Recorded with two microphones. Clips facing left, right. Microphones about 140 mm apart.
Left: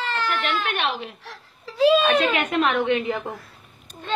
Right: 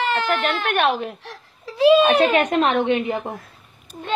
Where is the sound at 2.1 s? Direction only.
35° right (ahead or behind).